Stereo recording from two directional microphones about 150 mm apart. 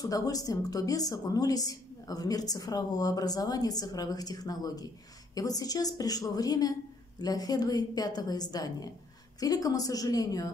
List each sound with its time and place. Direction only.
0.0 s a woman's voice: 25° left (ahead or behind)